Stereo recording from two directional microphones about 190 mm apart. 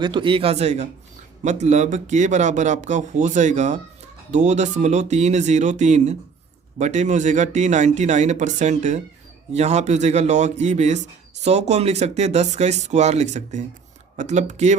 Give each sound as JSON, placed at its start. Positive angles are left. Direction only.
{"t": 0.0, "sound": "a man's voice", "side_deg": -25}